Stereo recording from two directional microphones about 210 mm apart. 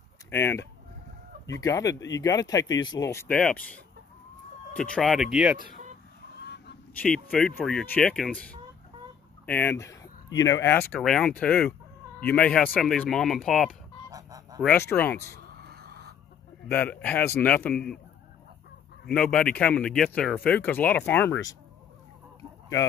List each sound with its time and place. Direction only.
0.3 s speech: 10° left (ahead or behind)
4.7 s speech: 5° left (ahead or behind)
6.4 s a sound: 50° left (ahead or behind)
6.9 s speech: 5° left (ahead or behind)
9.5 s speech: 10° left (ahead or behind)
14.1 s goose: 15° right (ahead or behind)
14.6 s speech: 10° left (ahead or behind)
15.5 s a sound: 50° right (ahead or behind)
16.7 s speech: 5° left (ahead or behind)
19.0 s speech: 5° left (ahead or behind)